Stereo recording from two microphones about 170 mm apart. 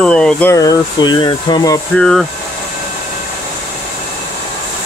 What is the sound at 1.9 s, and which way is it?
Speech, 5° left (ahead or behind).